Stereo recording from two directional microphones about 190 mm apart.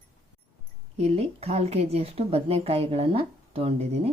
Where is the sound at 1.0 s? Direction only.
30° right (ahead or behind).